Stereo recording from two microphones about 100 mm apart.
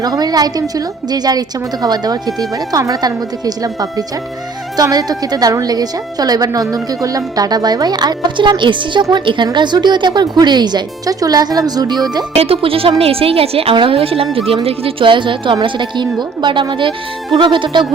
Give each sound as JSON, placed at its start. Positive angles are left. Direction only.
{"t": 0.0, "sound": "a woman's voice", "side_deg": -40}
{"t": 12.3, "sound": "a woman's voice", "side_deg": -80}